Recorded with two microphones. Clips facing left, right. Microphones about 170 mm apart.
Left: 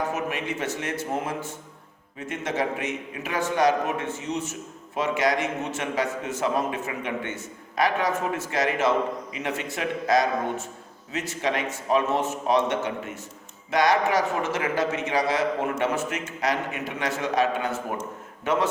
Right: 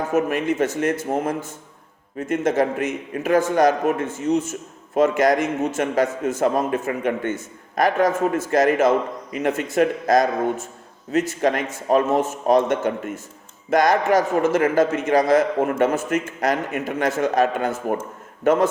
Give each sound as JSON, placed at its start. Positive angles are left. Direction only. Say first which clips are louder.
{"t": 0.1, "sound": "a man's voice", "louder": "right 8 dB", "side_deg": -45}